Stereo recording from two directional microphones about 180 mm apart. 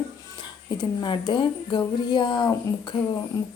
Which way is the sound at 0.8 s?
25° left (ahead or behind).